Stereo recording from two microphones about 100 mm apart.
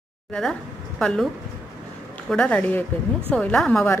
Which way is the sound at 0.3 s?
5° left (ahead or behind).